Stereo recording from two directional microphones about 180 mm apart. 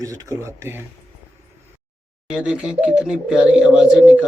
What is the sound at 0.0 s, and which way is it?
Speech, 20° right (ahead or behind).